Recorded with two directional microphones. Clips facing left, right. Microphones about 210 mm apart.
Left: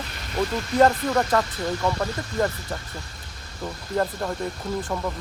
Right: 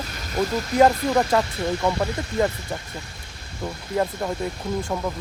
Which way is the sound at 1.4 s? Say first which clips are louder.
Right 2 dB; 15° right (ahead or behind).